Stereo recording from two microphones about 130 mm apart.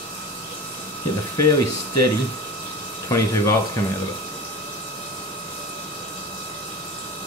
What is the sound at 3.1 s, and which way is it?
Speech, 25° left (ahead or behind).